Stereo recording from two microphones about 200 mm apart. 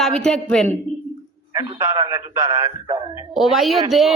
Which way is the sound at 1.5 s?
20° right (ahead or behind).